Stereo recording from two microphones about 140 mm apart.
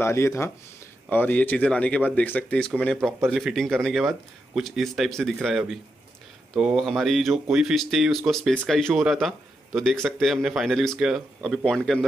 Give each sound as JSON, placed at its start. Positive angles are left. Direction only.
{"t": 0.0, "sound": "speech", "side_deg": 20}